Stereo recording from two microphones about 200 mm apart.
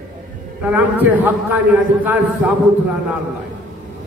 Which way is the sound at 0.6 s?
10° right (ahead or behind).